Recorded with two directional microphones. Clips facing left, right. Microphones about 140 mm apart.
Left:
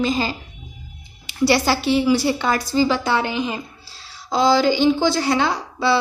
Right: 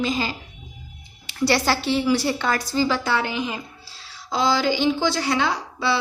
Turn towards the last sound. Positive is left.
turn(degrees=35)  # may be behind; listen again after turning